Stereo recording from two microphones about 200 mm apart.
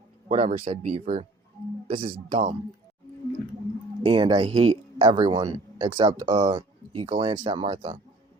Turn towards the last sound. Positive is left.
turn(degrees=-25)  # may be behind; listen again after turning